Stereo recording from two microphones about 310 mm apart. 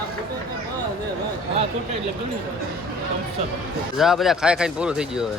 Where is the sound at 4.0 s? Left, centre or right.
Centre.